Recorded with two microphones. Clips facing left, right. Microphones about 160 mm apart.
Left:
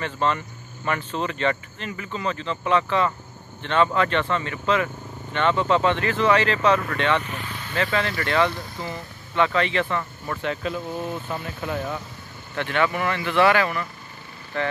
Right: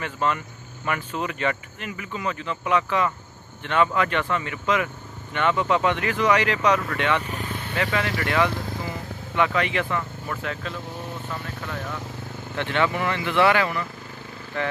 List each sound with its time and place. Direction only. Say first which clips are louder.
0.0 s speech: left 1 dB; 10° right (ahead or behind)
7.2 s vehicle: right 2 dB; 40° right (ahead or behind)
7.7 s speech: left 1 dB; 15° right (ahead or behind)
8.8 s vehicle: right 1 dB; 15° right (ahead or behind)
10.3 s speech: left 5 dB; 5° left (ahead or behind)
11.2 s speech: left 3 dB; 15° left (ahead or behind)
12.5 s speech: left 1 dB; 20° right (ahead or behind)